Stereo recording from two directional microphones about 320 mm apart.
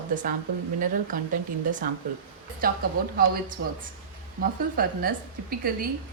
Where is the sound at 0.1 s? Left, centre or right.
Right.